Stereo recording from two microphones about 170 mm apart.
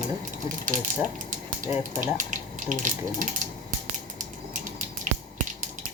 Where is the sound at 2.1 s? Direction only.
50° right (ahead or behind).